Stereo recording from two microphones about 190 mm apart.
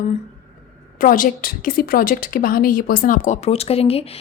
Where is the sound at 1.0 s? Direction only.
45° left (ahead or behind).